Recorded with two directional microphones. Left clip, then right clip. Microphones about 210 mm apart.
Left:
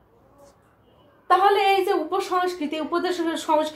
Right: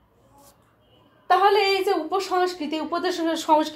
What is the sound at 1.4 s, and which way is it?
A woman's voice, 35° right (ahead or behind).